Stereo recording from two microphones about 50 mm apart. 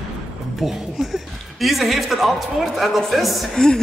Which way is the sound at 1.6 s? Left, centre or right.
Centre.